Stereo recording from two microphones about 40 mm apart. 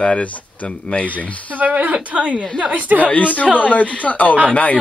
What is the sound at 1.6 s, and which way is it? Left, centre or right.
Speech, right.